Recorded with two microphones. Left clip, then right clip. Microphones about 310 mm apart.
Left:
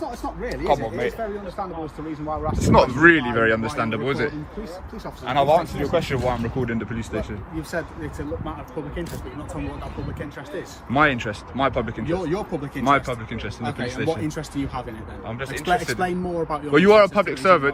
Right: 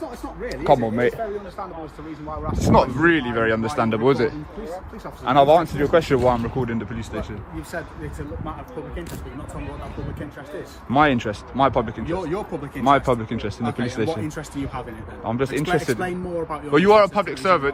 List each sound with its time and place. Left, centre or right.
0.4 s speech: right
2.6 s speech: centre
10.9 s speech: centre
15.3 s speech: centre
16.0 s a man's voice: centre